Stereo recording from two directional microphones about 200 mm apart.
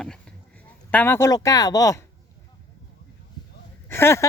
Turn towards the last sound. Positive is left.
turn(degrees=15)  # may be behind; listen again after turning